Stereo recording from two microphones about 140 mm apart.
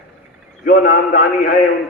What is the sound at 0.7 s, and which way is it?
Speech, 70° left (ahead or behind).